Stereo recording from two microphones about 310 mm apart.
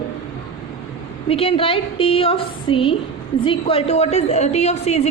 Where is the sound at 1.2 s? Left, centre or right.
Centre.